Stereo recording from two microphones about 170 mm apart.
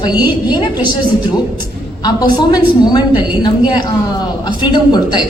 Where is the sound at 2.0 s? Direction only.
25° left (ahead or behind).